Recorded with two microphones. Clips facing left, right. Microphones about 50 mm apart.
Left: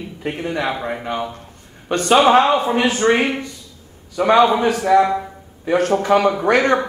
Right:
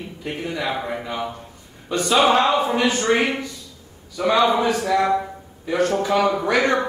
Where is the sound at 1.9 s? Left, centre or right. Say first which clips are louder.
Left 5 dB; left.